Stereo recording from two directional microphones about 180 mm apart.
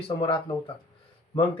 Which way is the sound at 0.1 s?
25° left (ahead or behind).